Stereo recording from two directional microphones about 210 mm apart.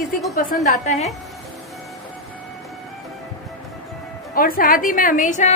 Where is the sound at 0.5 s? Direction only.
40° left (ahead or behind).